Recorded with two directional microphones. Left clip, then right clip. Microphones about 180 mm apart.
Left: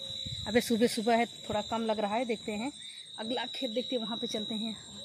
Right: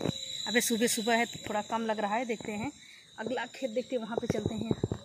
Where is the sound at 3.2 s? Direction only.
90° left.